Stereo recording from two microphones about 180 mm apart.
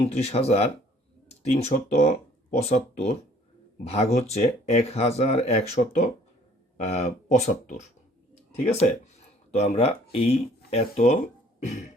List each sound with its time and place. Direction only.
0.0 s speech: 35° left (ahead or behind)